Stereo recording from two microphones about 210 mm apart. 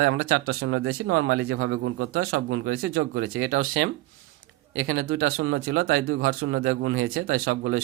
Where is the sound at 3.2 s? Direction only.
75° right (ahead or behind).